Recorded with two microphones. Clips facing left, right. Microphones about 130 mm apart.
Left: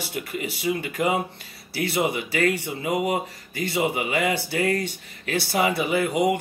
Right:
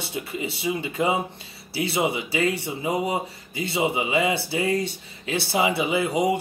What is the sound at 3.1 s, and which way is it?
Speech, 25° right (ahead or behind).